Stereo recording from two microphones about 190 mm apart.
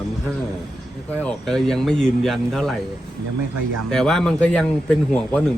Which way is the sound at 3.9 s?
Centre (ahead or behind).